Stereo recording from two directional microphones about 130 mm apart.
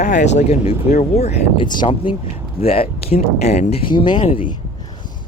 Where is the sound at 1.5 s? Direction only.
35° left (ahead or behind); by 3.8 s 60° left (ahead or behind).